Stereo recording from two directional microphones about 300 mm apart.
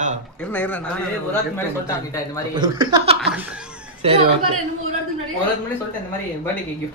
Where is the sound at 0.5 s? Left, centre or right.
Centre.